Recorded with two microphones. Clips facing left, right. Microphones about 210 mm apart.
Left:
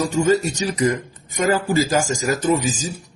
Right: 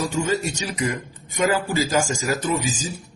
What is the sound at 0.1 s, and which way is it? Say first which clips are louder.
A man's voice: left 6 dB; 35° left (ahead or behind).